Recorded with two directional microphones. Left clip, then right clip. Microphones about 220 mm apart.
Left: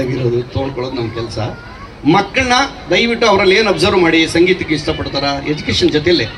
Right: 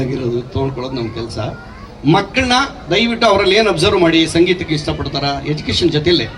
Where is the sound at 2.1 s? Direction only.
70° right (ahead or behind).